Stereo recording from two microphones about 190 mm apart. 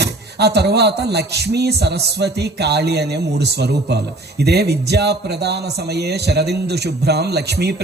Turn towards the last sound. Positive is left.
turn(degrees=-60)  # may be behind; listen again after turning